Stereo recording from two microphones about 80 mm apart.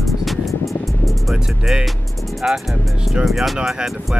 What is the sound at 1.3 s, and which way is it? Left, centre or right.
Speech, centre.